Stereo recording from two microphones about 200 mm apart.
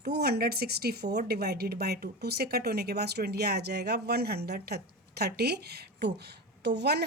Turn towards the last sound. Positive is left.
turn(degrees=-55)  # may be behind; listen again after turning